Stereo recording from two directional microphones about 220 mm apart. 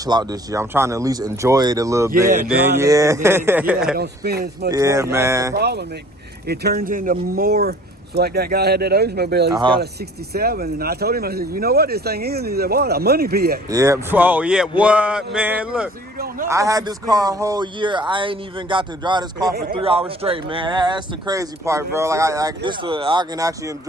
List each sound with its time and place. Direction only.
0.0 s speech: 15° right (ahead or behind)
3.9 s speech: 45° right (ahead or behind)
4.7 s speech: 15° right (ahead or behind)
5.5 s speech: 50° right (ahead or behind)
9.6 s speech: 20° right (ahead or behind)
10.3 s speech: 45° right (ahead or behind)
13.7 s speech: 15° right (ahead or behind)
16.1 s a man's voice: 45° right (ahead or behind)
16.5 s speech: 15° right (ahead or behind)